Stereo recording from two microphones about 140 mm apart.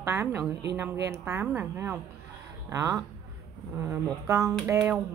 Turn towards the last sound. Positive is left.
turn(degrees=-20)  # may be behind; listen again after turning